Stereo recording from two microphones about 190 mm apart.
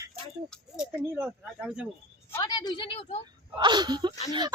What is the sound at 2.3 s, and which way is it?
Speech, 20° left (ahead or behind).